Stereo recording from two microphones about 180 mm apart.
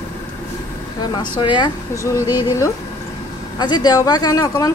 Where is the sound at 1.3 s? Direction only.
25° left (ahead or behind).